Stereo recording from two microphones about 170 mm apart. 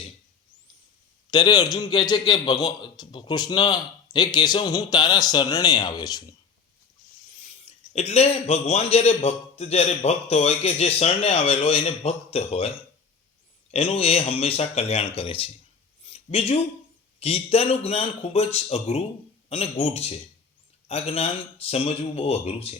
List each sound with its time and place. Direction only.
1.3 s a man's voice: 25° left (ahead or behind)
7.6 s a man's voice: 35° left (ahead or behind)
16.0 s a sound: 35° left (ahead or behind)
17.2 s a man's voice: 35° left (ahead or behind)